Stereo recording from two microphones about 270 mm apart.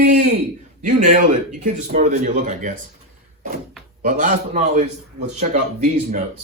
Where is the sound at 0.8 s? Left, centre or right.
Right.